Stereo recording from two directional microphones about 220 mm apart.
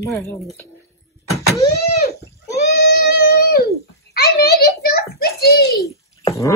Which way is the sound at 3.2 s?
45° left (ahead or behind).